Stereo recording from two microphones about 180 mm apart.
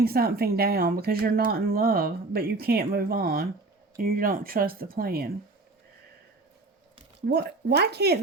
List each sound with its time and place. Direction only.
0.0 s speech: 60° right (ahead or behind)
7.3 s speech: 65° right (ahead or behind)